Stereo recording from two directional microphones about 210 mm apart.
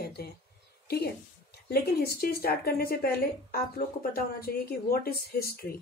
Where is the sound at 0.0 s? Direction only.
50° left (ahead or behind).